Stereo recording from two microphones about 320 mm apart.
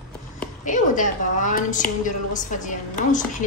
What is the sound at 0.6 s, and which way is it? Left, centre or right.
A woman's voice, left.